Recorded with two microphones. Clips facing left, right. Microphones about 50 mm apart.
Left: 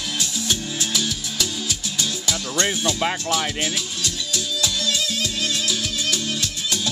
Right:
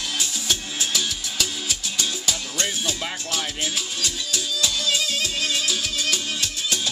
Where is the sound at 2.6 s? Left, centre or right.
Left.